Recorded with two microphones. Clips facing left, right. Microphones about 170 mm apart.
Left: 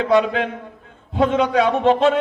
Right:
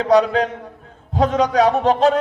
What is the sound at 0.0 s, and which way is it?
A man's voice, 40° right (ahead or behind).